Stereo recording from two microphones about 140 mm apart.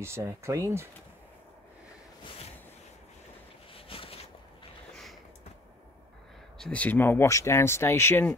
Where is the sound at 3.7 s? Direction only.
40° left (ahead or behind).